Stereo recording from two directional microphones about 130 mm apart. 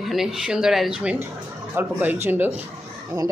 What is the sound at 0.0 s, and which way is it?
Speech, centre (ahead or behind).